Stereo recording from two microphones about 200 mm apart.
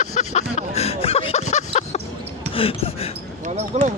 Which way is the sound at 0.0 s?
35° left (ahead or behind).